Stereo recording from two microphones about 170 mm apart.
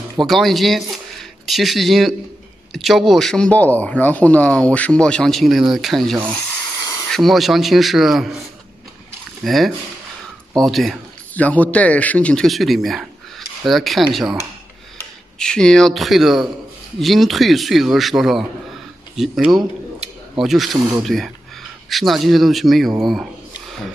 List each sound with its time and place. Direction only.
0.2 s speech: centre (ahead or behind)
9.4 s speech: centre (ahead or behind)
15.3 s speech: 5° left (ahead or behind)